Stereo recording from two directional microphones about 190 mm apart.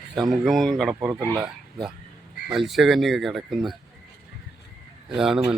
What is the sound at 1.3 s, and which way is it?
Speech, 15° right (ahead or behind).